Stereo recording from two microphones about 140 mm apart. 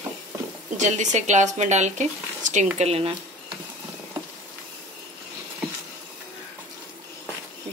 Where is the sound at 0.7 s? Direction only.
60° right (ahead or behind).